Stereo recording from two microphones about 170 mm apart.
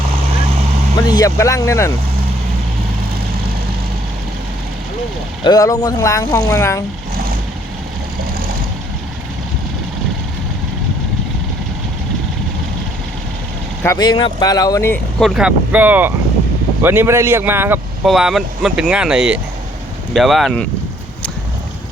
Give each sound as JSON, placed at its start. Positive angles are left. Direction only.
{"t": 0.9, "sound": "speech", "side_deg": 20}
{"t": 5.4, "sound": "speech", "side_deg": 20}
{"t": 13.8, "sound": "speech", "side_deg": 20}
{"t": 15.2, "sound": "speech", "side_deg": -5}
{"t": 18.0, "sound": "speech", "side_deg": 0}